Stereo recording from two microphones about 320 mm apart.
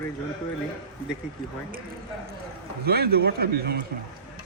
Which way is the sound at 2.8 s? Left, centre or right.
Right.